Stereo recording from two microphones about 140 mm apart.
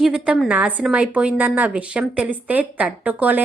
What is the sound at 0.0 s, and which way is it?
A woman's voice, 5° right (ahead or behind).